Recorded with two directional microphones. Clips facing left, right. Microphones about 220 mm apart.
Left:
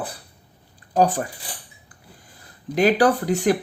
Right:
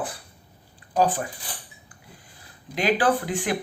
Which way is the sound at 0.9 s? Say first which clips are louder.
Left 3 dB; 45° left (ahead or behind).